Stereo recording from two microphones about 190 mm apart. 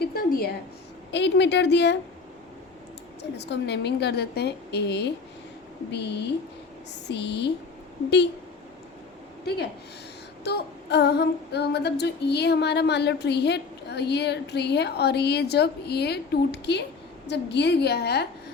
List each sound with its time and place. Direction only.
0.0 s a sound: 50° left (ahead or behind)
1.1 s female singing: 65° left (ahead or behind)
3.3 s female singing: 65° left (ahead or behind)
9.4 s speech: 55° left (ahead or behind)
10.4 s female singing: 60° left (ahead or behind)